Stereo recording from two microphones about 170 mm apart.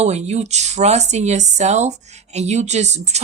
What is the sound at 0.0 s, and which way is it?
Speech, 40° right (ahead or behind).